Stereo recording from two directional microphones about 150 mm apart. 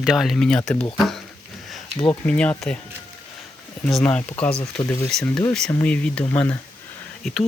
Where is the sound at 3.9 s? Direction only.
10° left (ahead or behind).